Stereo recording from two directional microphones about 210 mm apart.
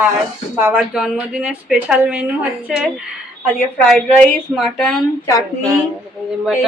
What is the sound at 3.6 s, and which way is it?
A woman's voice, 5° left (ahead or behind).